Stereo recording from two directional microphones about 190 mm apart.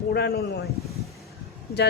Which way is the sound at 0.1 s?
60° left (ahead or behind).